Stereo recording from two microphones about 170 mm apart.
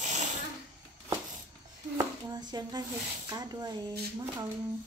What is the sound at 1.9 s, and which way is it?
Speech, 25° right (ahead or behind).